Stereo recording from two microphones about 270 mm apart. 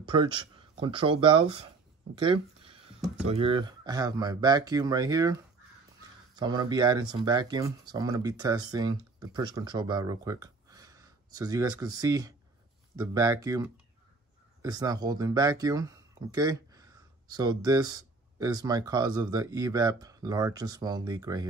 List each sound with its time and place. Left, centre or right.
0.0 s speech: centre
2.1 s a sound: centre
3.3 s speech: right